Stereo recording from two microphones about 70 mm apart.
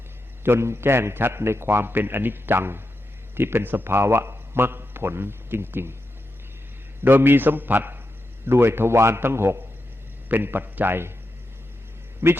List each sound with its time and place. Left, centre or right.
0.4 s a man's voice: right
7.0 s a man's voice: right
12.2 s a man's voice: right